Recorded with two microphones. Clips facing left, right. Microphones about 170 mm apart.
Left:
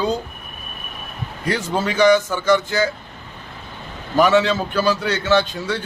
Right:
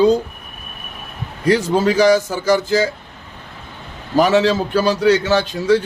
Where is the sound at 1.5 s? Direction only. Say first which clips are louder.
Right 7 dB; 35° right (ahead or behind).